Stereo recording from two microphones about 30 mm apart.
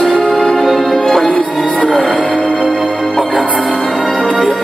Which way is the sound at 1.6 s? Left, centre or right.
Left.